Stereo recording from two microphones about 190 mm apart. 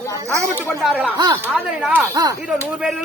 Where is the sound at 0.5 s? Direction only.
5° right (ahead or behind).